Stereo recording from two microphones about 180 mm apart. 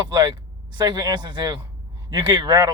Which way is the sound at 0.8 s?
25° right (ahead or behind).